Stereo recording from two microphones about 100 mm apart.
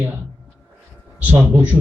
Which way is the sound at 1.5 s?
20° right (ahead or behind).